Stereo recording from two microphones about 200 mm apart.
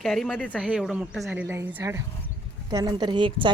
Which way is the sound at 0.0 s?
Centre (ahead or behind).